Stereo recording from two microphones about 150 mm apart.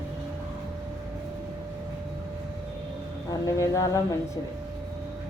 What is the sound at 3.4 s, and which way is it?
Speech, 25° left (ahead or behind).